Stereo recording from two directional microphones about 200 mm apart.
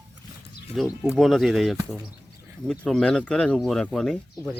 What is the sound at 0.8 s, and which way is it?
Speech, centre (ahead or behind).